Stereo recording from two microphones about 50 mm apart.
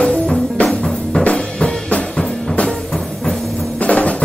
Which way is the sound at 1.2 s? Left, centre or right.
Left.